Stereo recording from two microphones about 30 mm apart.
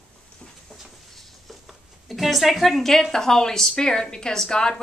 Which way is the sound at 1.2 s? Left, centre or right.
Centre.